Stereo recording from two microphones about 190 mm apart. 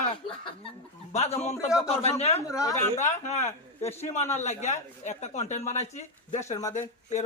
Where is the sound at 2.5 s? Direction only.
15° left (ahead or behind).